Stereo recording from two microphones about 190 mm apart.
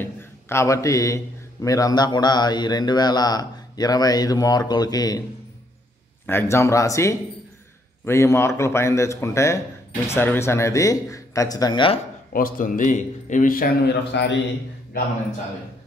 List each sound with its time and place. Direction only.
0.0 s a man's voice: 15° left (ahead or behind)
6.2 s speech: 15° left (ahead or behind)
12.3 s speech: 50° left (ahead or behind)
14.1 s a man's voice: 70° left (ahead or behind)